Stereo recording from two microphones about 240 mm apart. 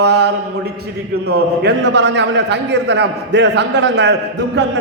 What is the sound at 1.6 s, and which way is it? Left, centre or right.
A man's voice, right.